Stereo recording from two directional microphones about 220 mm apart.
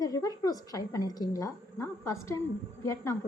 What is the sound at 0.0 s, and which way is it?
A woman's voice, 15° left (ahead or behind).